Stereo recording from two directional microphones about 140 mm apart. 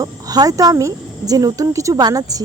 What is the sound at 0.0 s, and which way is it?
Speech, 25° right (ahead or behind).